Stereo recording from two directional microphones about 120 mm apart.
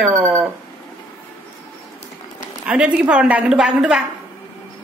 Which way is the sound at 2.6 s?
10° right (ahead or behind).